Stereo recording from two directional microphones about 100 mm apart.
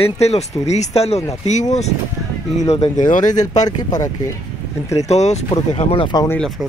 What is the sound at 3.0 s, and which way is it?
Speech, 45° left (ahead or behind).